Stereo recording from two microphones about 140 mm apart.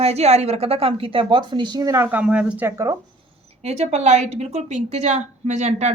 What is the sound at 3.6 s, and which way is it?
A woman's voice, 50° right (ahead or behind).